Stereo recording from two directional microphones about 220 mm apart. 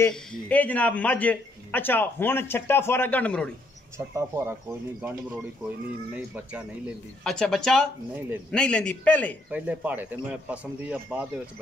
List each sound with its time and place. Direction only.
0.0 s speech: 5° left (ahead or behind)
4.1 s a man's voice: 10° right (ahead or behind); by 9.4 s 5° left (ahead or behind)
9.5 s a man's voice: 5° right (ahead or behind)